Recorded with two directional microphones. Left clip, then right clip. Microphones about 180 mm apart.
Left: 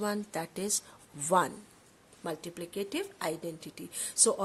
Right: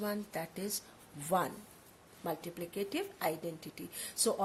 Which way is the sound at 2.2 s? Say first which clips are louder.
Left 1 dB; 40° left (ahead or behind).